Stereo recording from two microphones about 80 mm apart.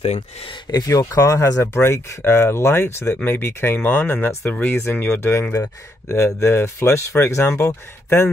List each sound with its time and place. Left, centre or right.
0.7 s speech: left